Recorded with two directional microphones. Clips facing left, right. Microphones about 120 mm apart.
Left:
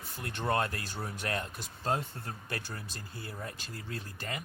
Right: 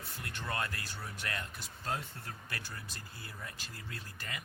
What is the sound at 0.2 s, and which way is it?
Speech, 30° left (ahead or behind).